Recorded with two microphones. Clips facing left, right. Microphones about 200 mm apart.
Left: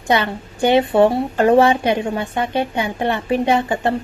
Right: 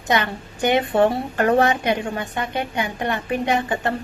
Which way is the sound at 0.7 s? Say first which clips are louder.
Left 4 dB; 20° left (ahead or behind).